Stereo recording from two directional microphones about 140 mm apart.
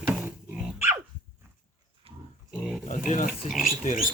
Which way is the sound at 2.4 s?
5° right (ahead or behind).